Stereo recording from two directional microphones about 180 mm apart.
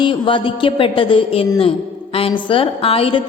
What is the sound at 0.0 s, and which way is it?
A woman's voice, 30° left (ahead or behind).